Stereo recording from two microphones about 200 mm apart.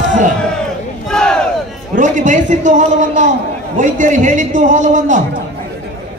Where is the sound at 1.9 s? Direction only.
40° right (ahead or behind).